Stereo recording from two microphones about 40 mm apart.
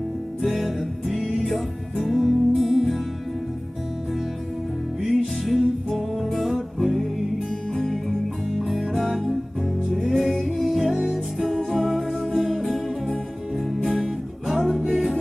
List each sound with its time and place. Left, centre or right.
0.4 s music: centre
5.2 s music: centre